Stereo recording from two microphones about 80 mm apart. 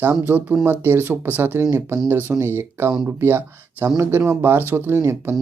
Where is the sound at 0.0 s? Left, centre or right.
Right.